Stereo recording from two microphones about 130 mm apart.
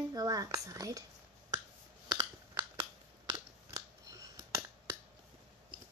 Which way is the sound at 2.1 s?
30° right (ahead or behind).